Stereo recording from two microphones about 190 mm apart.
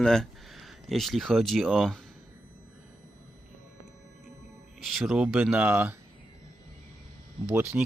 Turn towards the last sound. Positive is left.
turn(degrees=-5)  # may be behind; listen again after turning